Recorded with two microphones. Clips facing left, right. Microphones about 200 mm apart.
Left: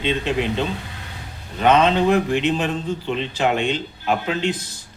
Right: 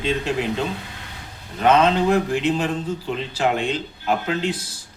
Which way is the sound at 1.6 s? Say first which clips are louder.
Left 1 dB; centre (ahead or behind).